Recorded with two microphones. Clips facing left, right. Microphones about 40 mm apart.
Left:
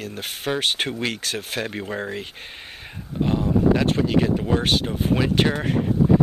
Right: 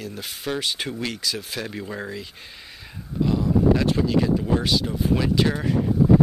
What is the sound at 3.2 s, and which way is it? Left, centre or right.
Speech, left.